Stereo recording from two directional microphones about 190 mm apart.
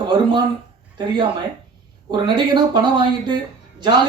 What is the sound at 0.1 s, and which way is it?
Speech, 25° right (ahead or behind).